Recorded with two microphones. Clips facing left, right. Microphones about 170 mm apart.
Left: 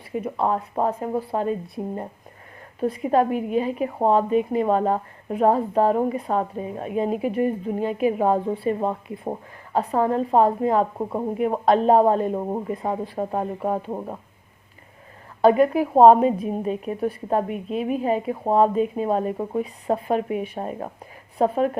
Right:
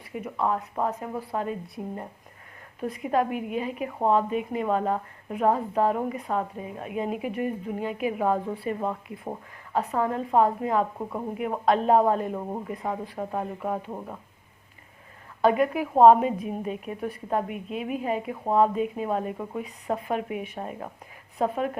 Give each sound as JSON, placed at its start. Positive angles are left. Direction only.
{"t": 0.1, "sound": "a woman's voice", "side_deg": 30}
{"t": 15.4, "sound": "a woman's voice", "side_deg": 35}